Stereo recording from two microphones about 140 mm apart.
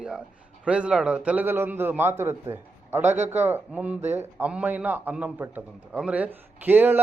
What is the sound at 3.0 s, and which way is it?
Speech, 55° right (ahead or behind).